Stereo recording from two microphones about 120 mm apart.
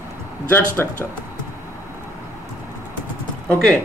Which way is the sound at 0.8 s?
20° left (ahead or behind).